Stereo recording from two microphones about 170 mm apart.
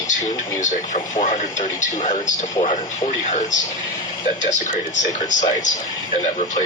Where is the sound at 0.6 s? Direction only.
45° left (ahead or behind).